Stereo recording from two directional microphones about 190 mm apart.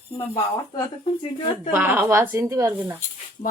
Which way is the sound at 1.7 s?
10° right (ahead or behind).